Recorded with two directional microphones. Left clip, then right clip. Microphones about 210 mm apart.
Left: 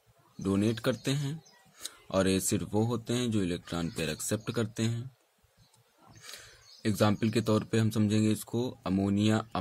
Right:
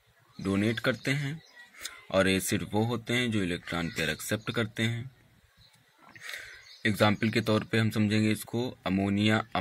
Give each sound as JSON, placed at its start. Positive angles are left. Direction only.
{"t": 0.4, "sound": "speech", "side_deg": 15}
{"t": 6.3, "sound": "speech", "side_deg": 15}